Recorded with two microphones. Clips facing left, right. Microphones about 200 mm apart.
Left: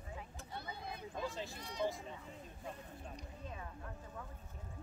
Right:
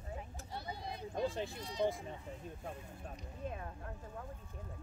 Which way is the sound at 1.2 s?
55° right (ahead or behind).